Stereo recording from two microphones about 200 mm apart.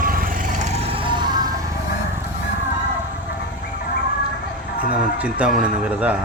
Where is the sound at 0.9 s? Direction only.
25° right (ahead or behind).